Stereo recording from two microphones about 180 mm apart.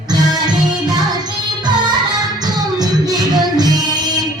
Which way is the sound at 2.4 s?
20° right (ahead or behind).